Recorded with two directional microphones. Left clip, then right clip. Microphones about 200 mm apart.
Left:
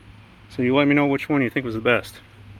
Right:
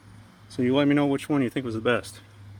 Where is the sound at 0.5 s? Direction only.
5° right (ahead or behind).